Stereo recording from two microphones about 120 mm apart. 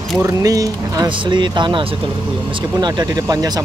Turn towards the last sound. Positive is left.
turn(degrees=-30)  # may be behind; listen again after turning